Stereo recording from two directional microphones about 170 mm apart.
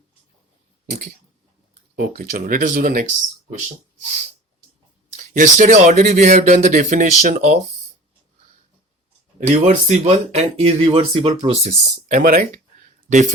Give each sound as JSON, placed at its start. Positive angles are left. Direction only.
{"t": 1.7, "sound": "speech", "side_deg": -50}
{"t": 5.4, "sound": "speech", "side_deg": -45}
{"t": 9.5, "sound": "speech", "side_deg": -40}